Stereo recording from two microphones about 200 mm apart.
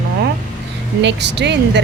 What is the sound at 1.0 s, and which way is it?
Speech, 60° right (ahead or behind).